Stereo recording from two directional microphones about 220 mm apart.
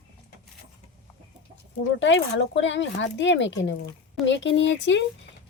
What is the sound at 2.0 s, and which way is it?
Speech, 55° left (ahead or behind).